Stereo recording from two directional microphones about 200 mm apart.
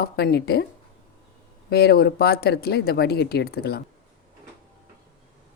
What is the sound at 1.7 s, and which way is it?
Speech, 50° left (ahead or behind).